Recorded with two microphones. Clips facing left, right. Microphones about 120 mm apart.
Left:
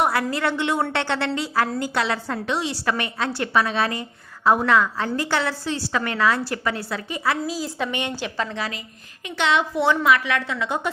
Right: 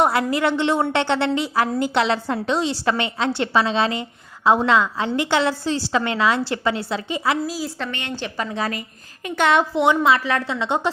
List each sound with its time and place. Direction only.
0.0 s a woman's voice: 20° right (ahead or behind)
2.5 s a woman's voice: 30° right (ahead or behind)
7.4 s a woman's voice: centre (ahead or behind)
7.9 s a woman's voice: 15° left (ahead or behind)
9.2 s a woman's voice: 50° right (ahead or behind)
9.7 s a woman's voice: 20° right (ahead or behind)